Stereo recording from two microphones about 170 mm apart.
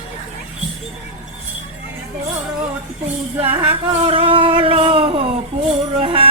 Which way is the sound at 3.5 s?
10° right (ahead or behind).